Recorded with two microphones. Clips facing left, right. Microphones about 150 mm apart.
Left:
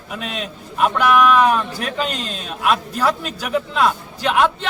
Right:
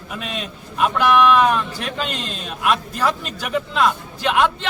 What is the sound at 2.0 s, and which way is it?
Speech, 40° left (ahead or behind).